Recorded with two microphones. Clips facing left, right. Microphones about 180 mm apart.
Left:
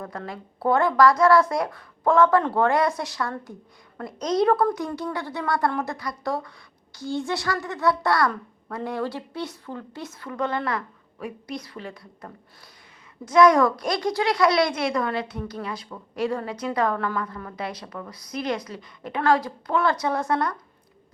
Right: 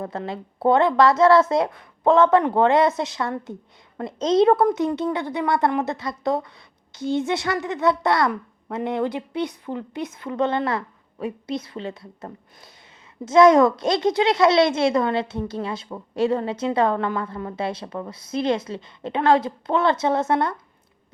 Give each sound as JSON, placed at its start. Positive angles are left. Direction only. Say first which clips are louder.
{"t": 0.0, "sound": "a child's voice", "louder": "right 5 dB", "side_deg": -25}